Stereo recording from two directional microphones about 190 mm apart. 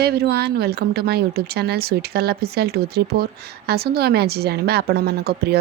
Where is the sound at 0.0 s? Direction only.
60° right (ahead or behind).